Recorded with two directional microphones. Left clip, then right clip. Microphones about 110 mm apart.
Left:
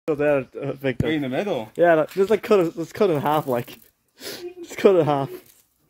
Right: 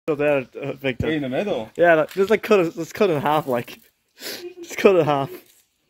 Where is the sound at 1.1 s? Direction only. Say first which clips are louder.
Right 1 dB; 55° right (ahead or behind).